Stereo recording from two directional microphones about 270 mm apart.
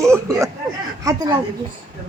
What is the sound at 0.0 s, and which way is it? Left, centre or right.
Speech, centre.